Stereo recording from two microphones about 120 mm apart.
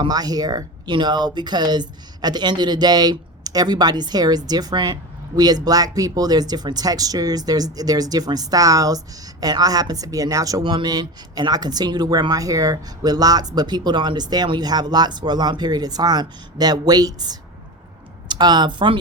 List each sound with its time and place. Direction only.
0.0 s speech: 35° right (ahead or behind)